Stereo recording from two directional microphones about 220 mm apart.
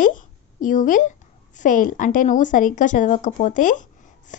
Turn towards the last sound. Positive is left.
turn(degrees=35)  # may be behind; listen again after turning